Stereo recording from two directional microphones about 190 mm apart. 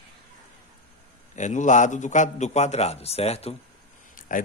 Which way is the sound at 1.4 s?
40° left (ahead or behind).